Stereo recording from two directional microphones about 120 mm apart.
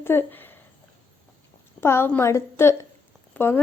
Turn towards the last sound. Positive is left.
turn(degrees=20)  # may be behind; listen again after turning